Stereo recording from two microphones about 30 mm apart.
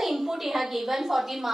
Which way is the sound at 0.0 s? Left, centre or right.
Centre.